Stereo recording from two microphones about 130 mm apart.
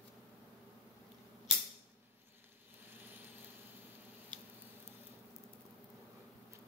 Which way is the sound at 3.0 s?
15° right (ahead or behind).